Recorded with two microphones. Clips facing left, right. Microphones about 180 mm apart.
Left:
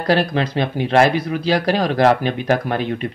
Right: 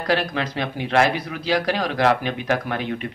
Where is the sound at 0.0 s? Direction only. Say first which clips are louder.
Left 5 dB; 35° left (ahead or behind).